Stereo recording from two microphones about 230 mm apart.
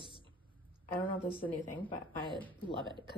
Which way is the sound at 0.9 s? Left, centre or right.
Centre.